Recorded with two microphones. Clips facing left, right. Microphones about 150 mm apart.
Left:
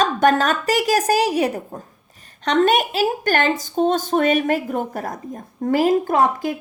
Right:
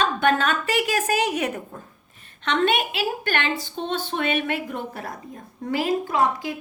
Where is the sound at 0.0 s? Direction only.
40° left (ahead or behind).